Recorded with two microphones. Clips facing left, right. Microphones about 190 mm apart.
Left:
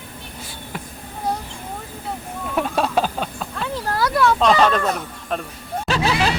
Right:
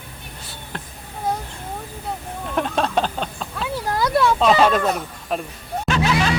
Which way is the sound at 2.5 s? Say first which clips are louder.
Left 1 dB; 5° left (ahead or behind).